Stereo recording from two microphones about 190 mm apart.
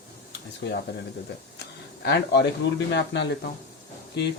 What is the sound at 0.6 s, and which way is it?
Speech, 70° left (ahead or behind).